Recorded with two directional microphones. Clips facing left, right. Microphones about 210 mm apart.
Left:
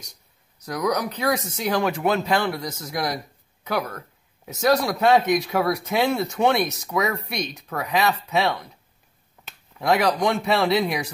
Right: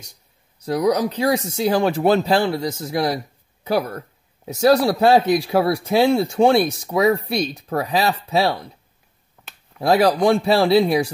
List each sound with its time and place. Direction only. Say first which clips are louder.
0.7 s speech: right 6 dB; 30° right (ahead or behind)
9.8 s speech: right 5 dB; 30° right (ahead or behind)